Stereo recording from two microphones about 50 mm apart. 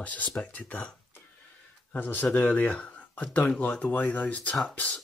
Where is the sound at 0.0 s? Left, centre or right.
Left.